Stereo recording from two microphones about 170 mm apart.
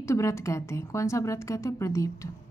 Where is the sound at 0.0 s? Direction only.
20° left (ahead or behind).